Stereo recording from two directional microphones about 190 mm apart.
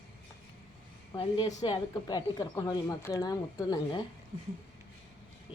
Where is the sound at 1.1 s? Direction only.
25° left (ahead or behind).